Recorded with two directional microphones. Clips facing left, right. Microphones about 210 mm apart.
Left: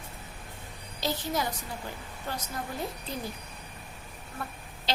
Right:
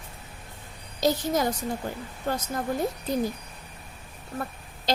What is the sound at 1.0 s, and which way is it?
A woman's voice, 45° right (ahead or behind).